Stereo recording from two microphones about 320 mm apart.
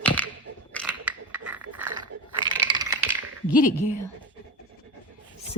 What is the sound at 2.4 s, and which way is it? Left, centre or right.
Computer keyboard, centre.